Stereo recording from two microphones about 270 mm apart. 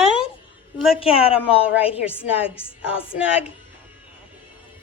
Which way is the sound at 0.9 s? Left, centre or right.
Centre.